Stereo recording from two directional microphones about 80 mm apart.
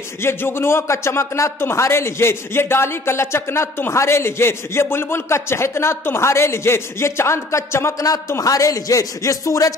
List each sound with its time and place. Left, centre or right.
0.2 s a man's voice: left